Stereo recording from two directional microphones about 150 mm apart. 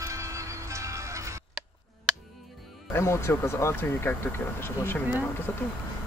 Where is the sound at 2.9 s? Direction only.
20° left (ahead or behind).